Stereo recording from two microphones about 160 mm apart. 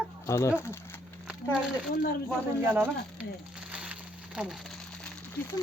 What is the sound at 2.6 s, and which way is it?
Speech, 15° right (ahead or behind).